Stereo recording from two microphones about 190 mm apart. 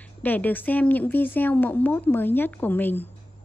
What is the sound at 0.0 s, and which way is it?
A woman's voice, 10° left (ahead or behind).